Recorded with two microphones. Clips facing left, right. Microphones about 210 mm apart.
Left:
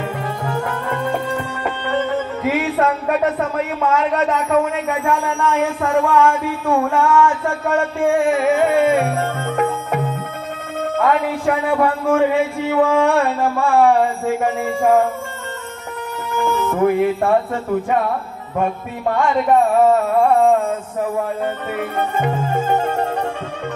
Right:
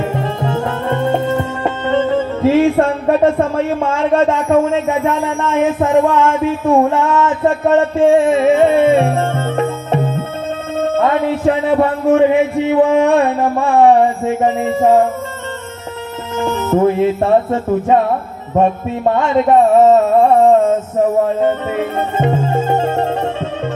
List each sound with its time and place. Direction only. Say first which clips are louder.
0.1 s music: right 5 dB; 25° right (ahead or behind)
2.8 s a man's voice: right 5 dB; 30° right (ahead or behind)
16.3 s speech: right 3 dB; 20° right (ahead or behind)